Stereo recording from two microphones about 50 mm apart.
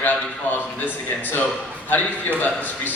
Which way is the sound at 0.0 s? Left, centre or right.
Left.